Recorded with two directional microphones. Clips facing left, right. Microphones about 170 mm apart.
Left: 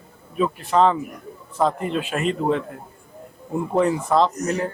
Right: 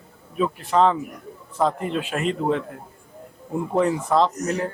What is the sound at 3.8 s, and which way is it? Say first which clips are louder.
Speech: left 1 dB; 20° left (ahead or behind).